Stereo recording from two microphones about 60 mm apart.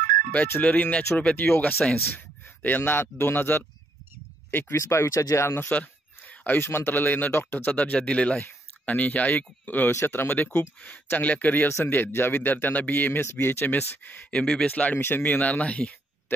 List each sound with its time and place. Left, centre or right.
0.6 s speech: left
2.1 s a sound: left
2.8 s speech: left
4.7 s speech: left
5.7 s speech: left
9.8 s speech: left
13.2 s speech: left
14.3 s speech: centre
14.7 s speech: left
15.0 s speech: left